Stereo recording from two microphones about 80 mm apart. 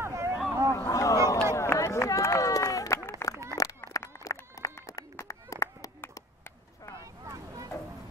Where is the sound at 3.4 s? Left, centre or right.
Left.